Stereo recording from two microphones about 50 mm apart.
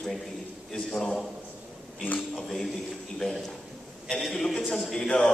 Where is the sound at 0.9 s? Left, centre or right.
Centre.